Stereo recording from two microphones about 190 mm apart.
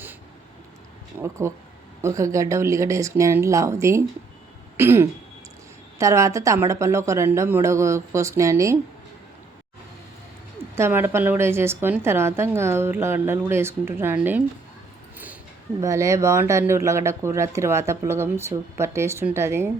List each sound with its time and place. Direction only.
1.2 s speech: 15° right (ahead or behind)
10.8 s speech: 15° right (ahead or behind)
15.8 s speech: 15° right (ahead or behind)